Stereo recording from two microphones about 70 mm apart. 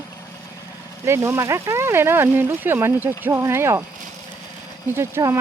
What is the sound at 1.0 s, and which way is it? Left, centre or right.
Speech, right.